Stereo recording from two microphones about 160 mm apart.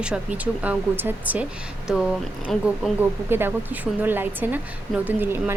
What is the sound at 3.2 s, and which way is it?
A woman's voice, 15° right (ahead or behind).